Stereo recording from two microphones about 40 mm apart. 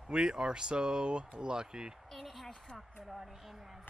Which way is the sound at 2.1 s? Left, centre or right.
Centre.